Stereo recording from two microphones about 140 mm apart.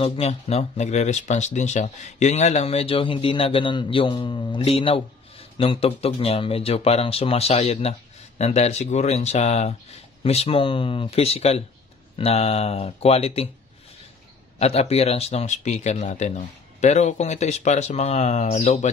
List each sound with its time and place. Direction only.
0.0 s speech: 45° left (ahead or behind)
14.6 s speech: 45° left (ahead or behind)